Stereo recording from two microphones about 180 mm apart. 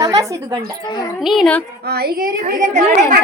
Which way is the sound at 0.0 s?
20° right (ahead or behind).